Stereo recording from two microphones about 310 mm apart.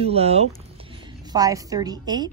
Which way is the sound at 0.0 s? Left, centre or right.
Centre.